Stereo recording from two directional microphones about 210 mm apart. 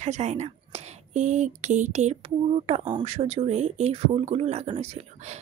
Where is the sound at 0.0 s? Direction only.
35° right (ahead or behind).